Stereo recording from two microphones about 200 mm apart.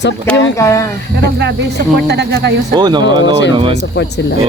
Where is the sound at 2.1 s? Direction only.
55° right (ahead or behind).